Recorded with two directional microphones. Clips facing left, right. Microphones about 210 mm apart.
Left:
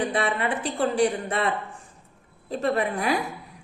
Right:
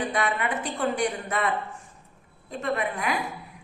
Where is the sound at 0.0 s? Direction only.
30° left (ahead or behind).